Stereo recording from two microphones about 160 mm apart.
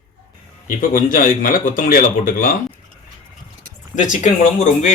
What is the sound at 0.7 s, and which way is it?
Speech, 60° left (ahead or behind).